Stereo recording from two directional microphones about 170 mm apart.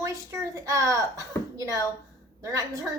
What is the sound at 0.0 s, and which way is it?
A child's voice, 20° right (ahead or behind).